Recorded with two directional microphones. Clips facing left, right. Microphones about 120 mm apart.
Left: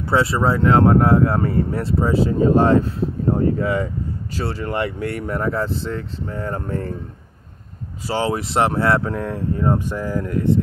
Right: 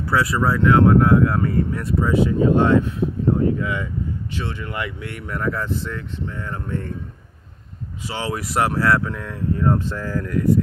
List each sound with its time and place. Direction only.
0.1 s speech: 30° left (ahead or behind)
8.1 s speech: 30° left (ahead or behind)
9.7 s speech: 15° left (ahead or behind)